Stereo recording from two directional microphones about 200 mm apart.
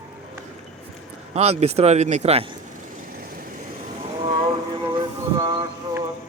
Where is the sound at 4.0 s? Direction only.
25° right (ahead or behind).